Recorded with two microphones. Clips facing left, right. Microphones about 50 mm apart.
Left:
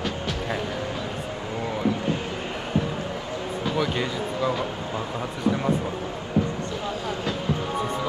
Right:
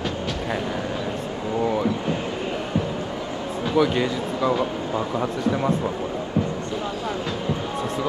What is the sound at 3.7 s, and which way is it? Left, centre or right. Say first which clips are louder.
Speech: right 7 dB; centre.